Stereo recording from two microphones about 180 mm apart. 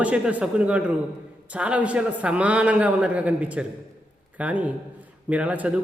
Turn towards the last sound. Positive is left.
turn(degrees=-10)  # may be behind; listen again after turning